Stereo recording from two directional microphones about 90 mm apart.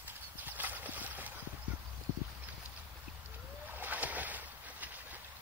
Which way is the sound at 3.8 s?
20° right (ahead or behind).